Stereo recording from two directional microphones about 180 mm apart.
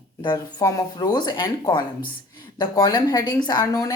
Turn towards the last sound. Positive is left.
turn(degrees=20)  # may be behind; listen again after turning